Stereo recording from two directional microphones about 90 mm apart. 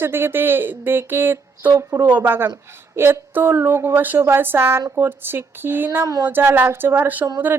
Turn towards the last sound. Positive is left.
turn(degrees=-20)  # may be behind; listen again after turning